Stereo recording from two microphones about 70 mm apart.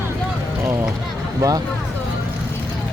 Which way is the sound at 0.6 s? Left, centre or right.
Right.